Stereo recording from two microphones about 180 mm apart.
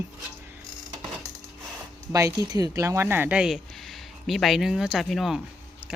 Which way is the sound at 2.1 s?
20° right (ahead or behind).